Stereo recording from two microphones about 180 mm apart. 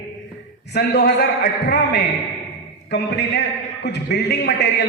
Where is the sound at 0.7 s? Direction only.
65° left (ahead or behind).